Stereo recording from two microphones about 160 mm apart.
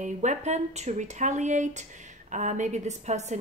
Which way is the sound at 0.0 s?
50° right (ahead or behind).